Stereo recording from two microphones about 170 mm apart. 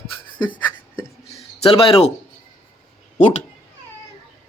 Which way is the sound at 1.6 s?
35° left (ahead or behind).